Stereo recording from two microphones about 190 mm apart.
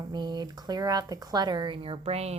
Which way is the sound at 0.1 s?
20° right (ahead or behind).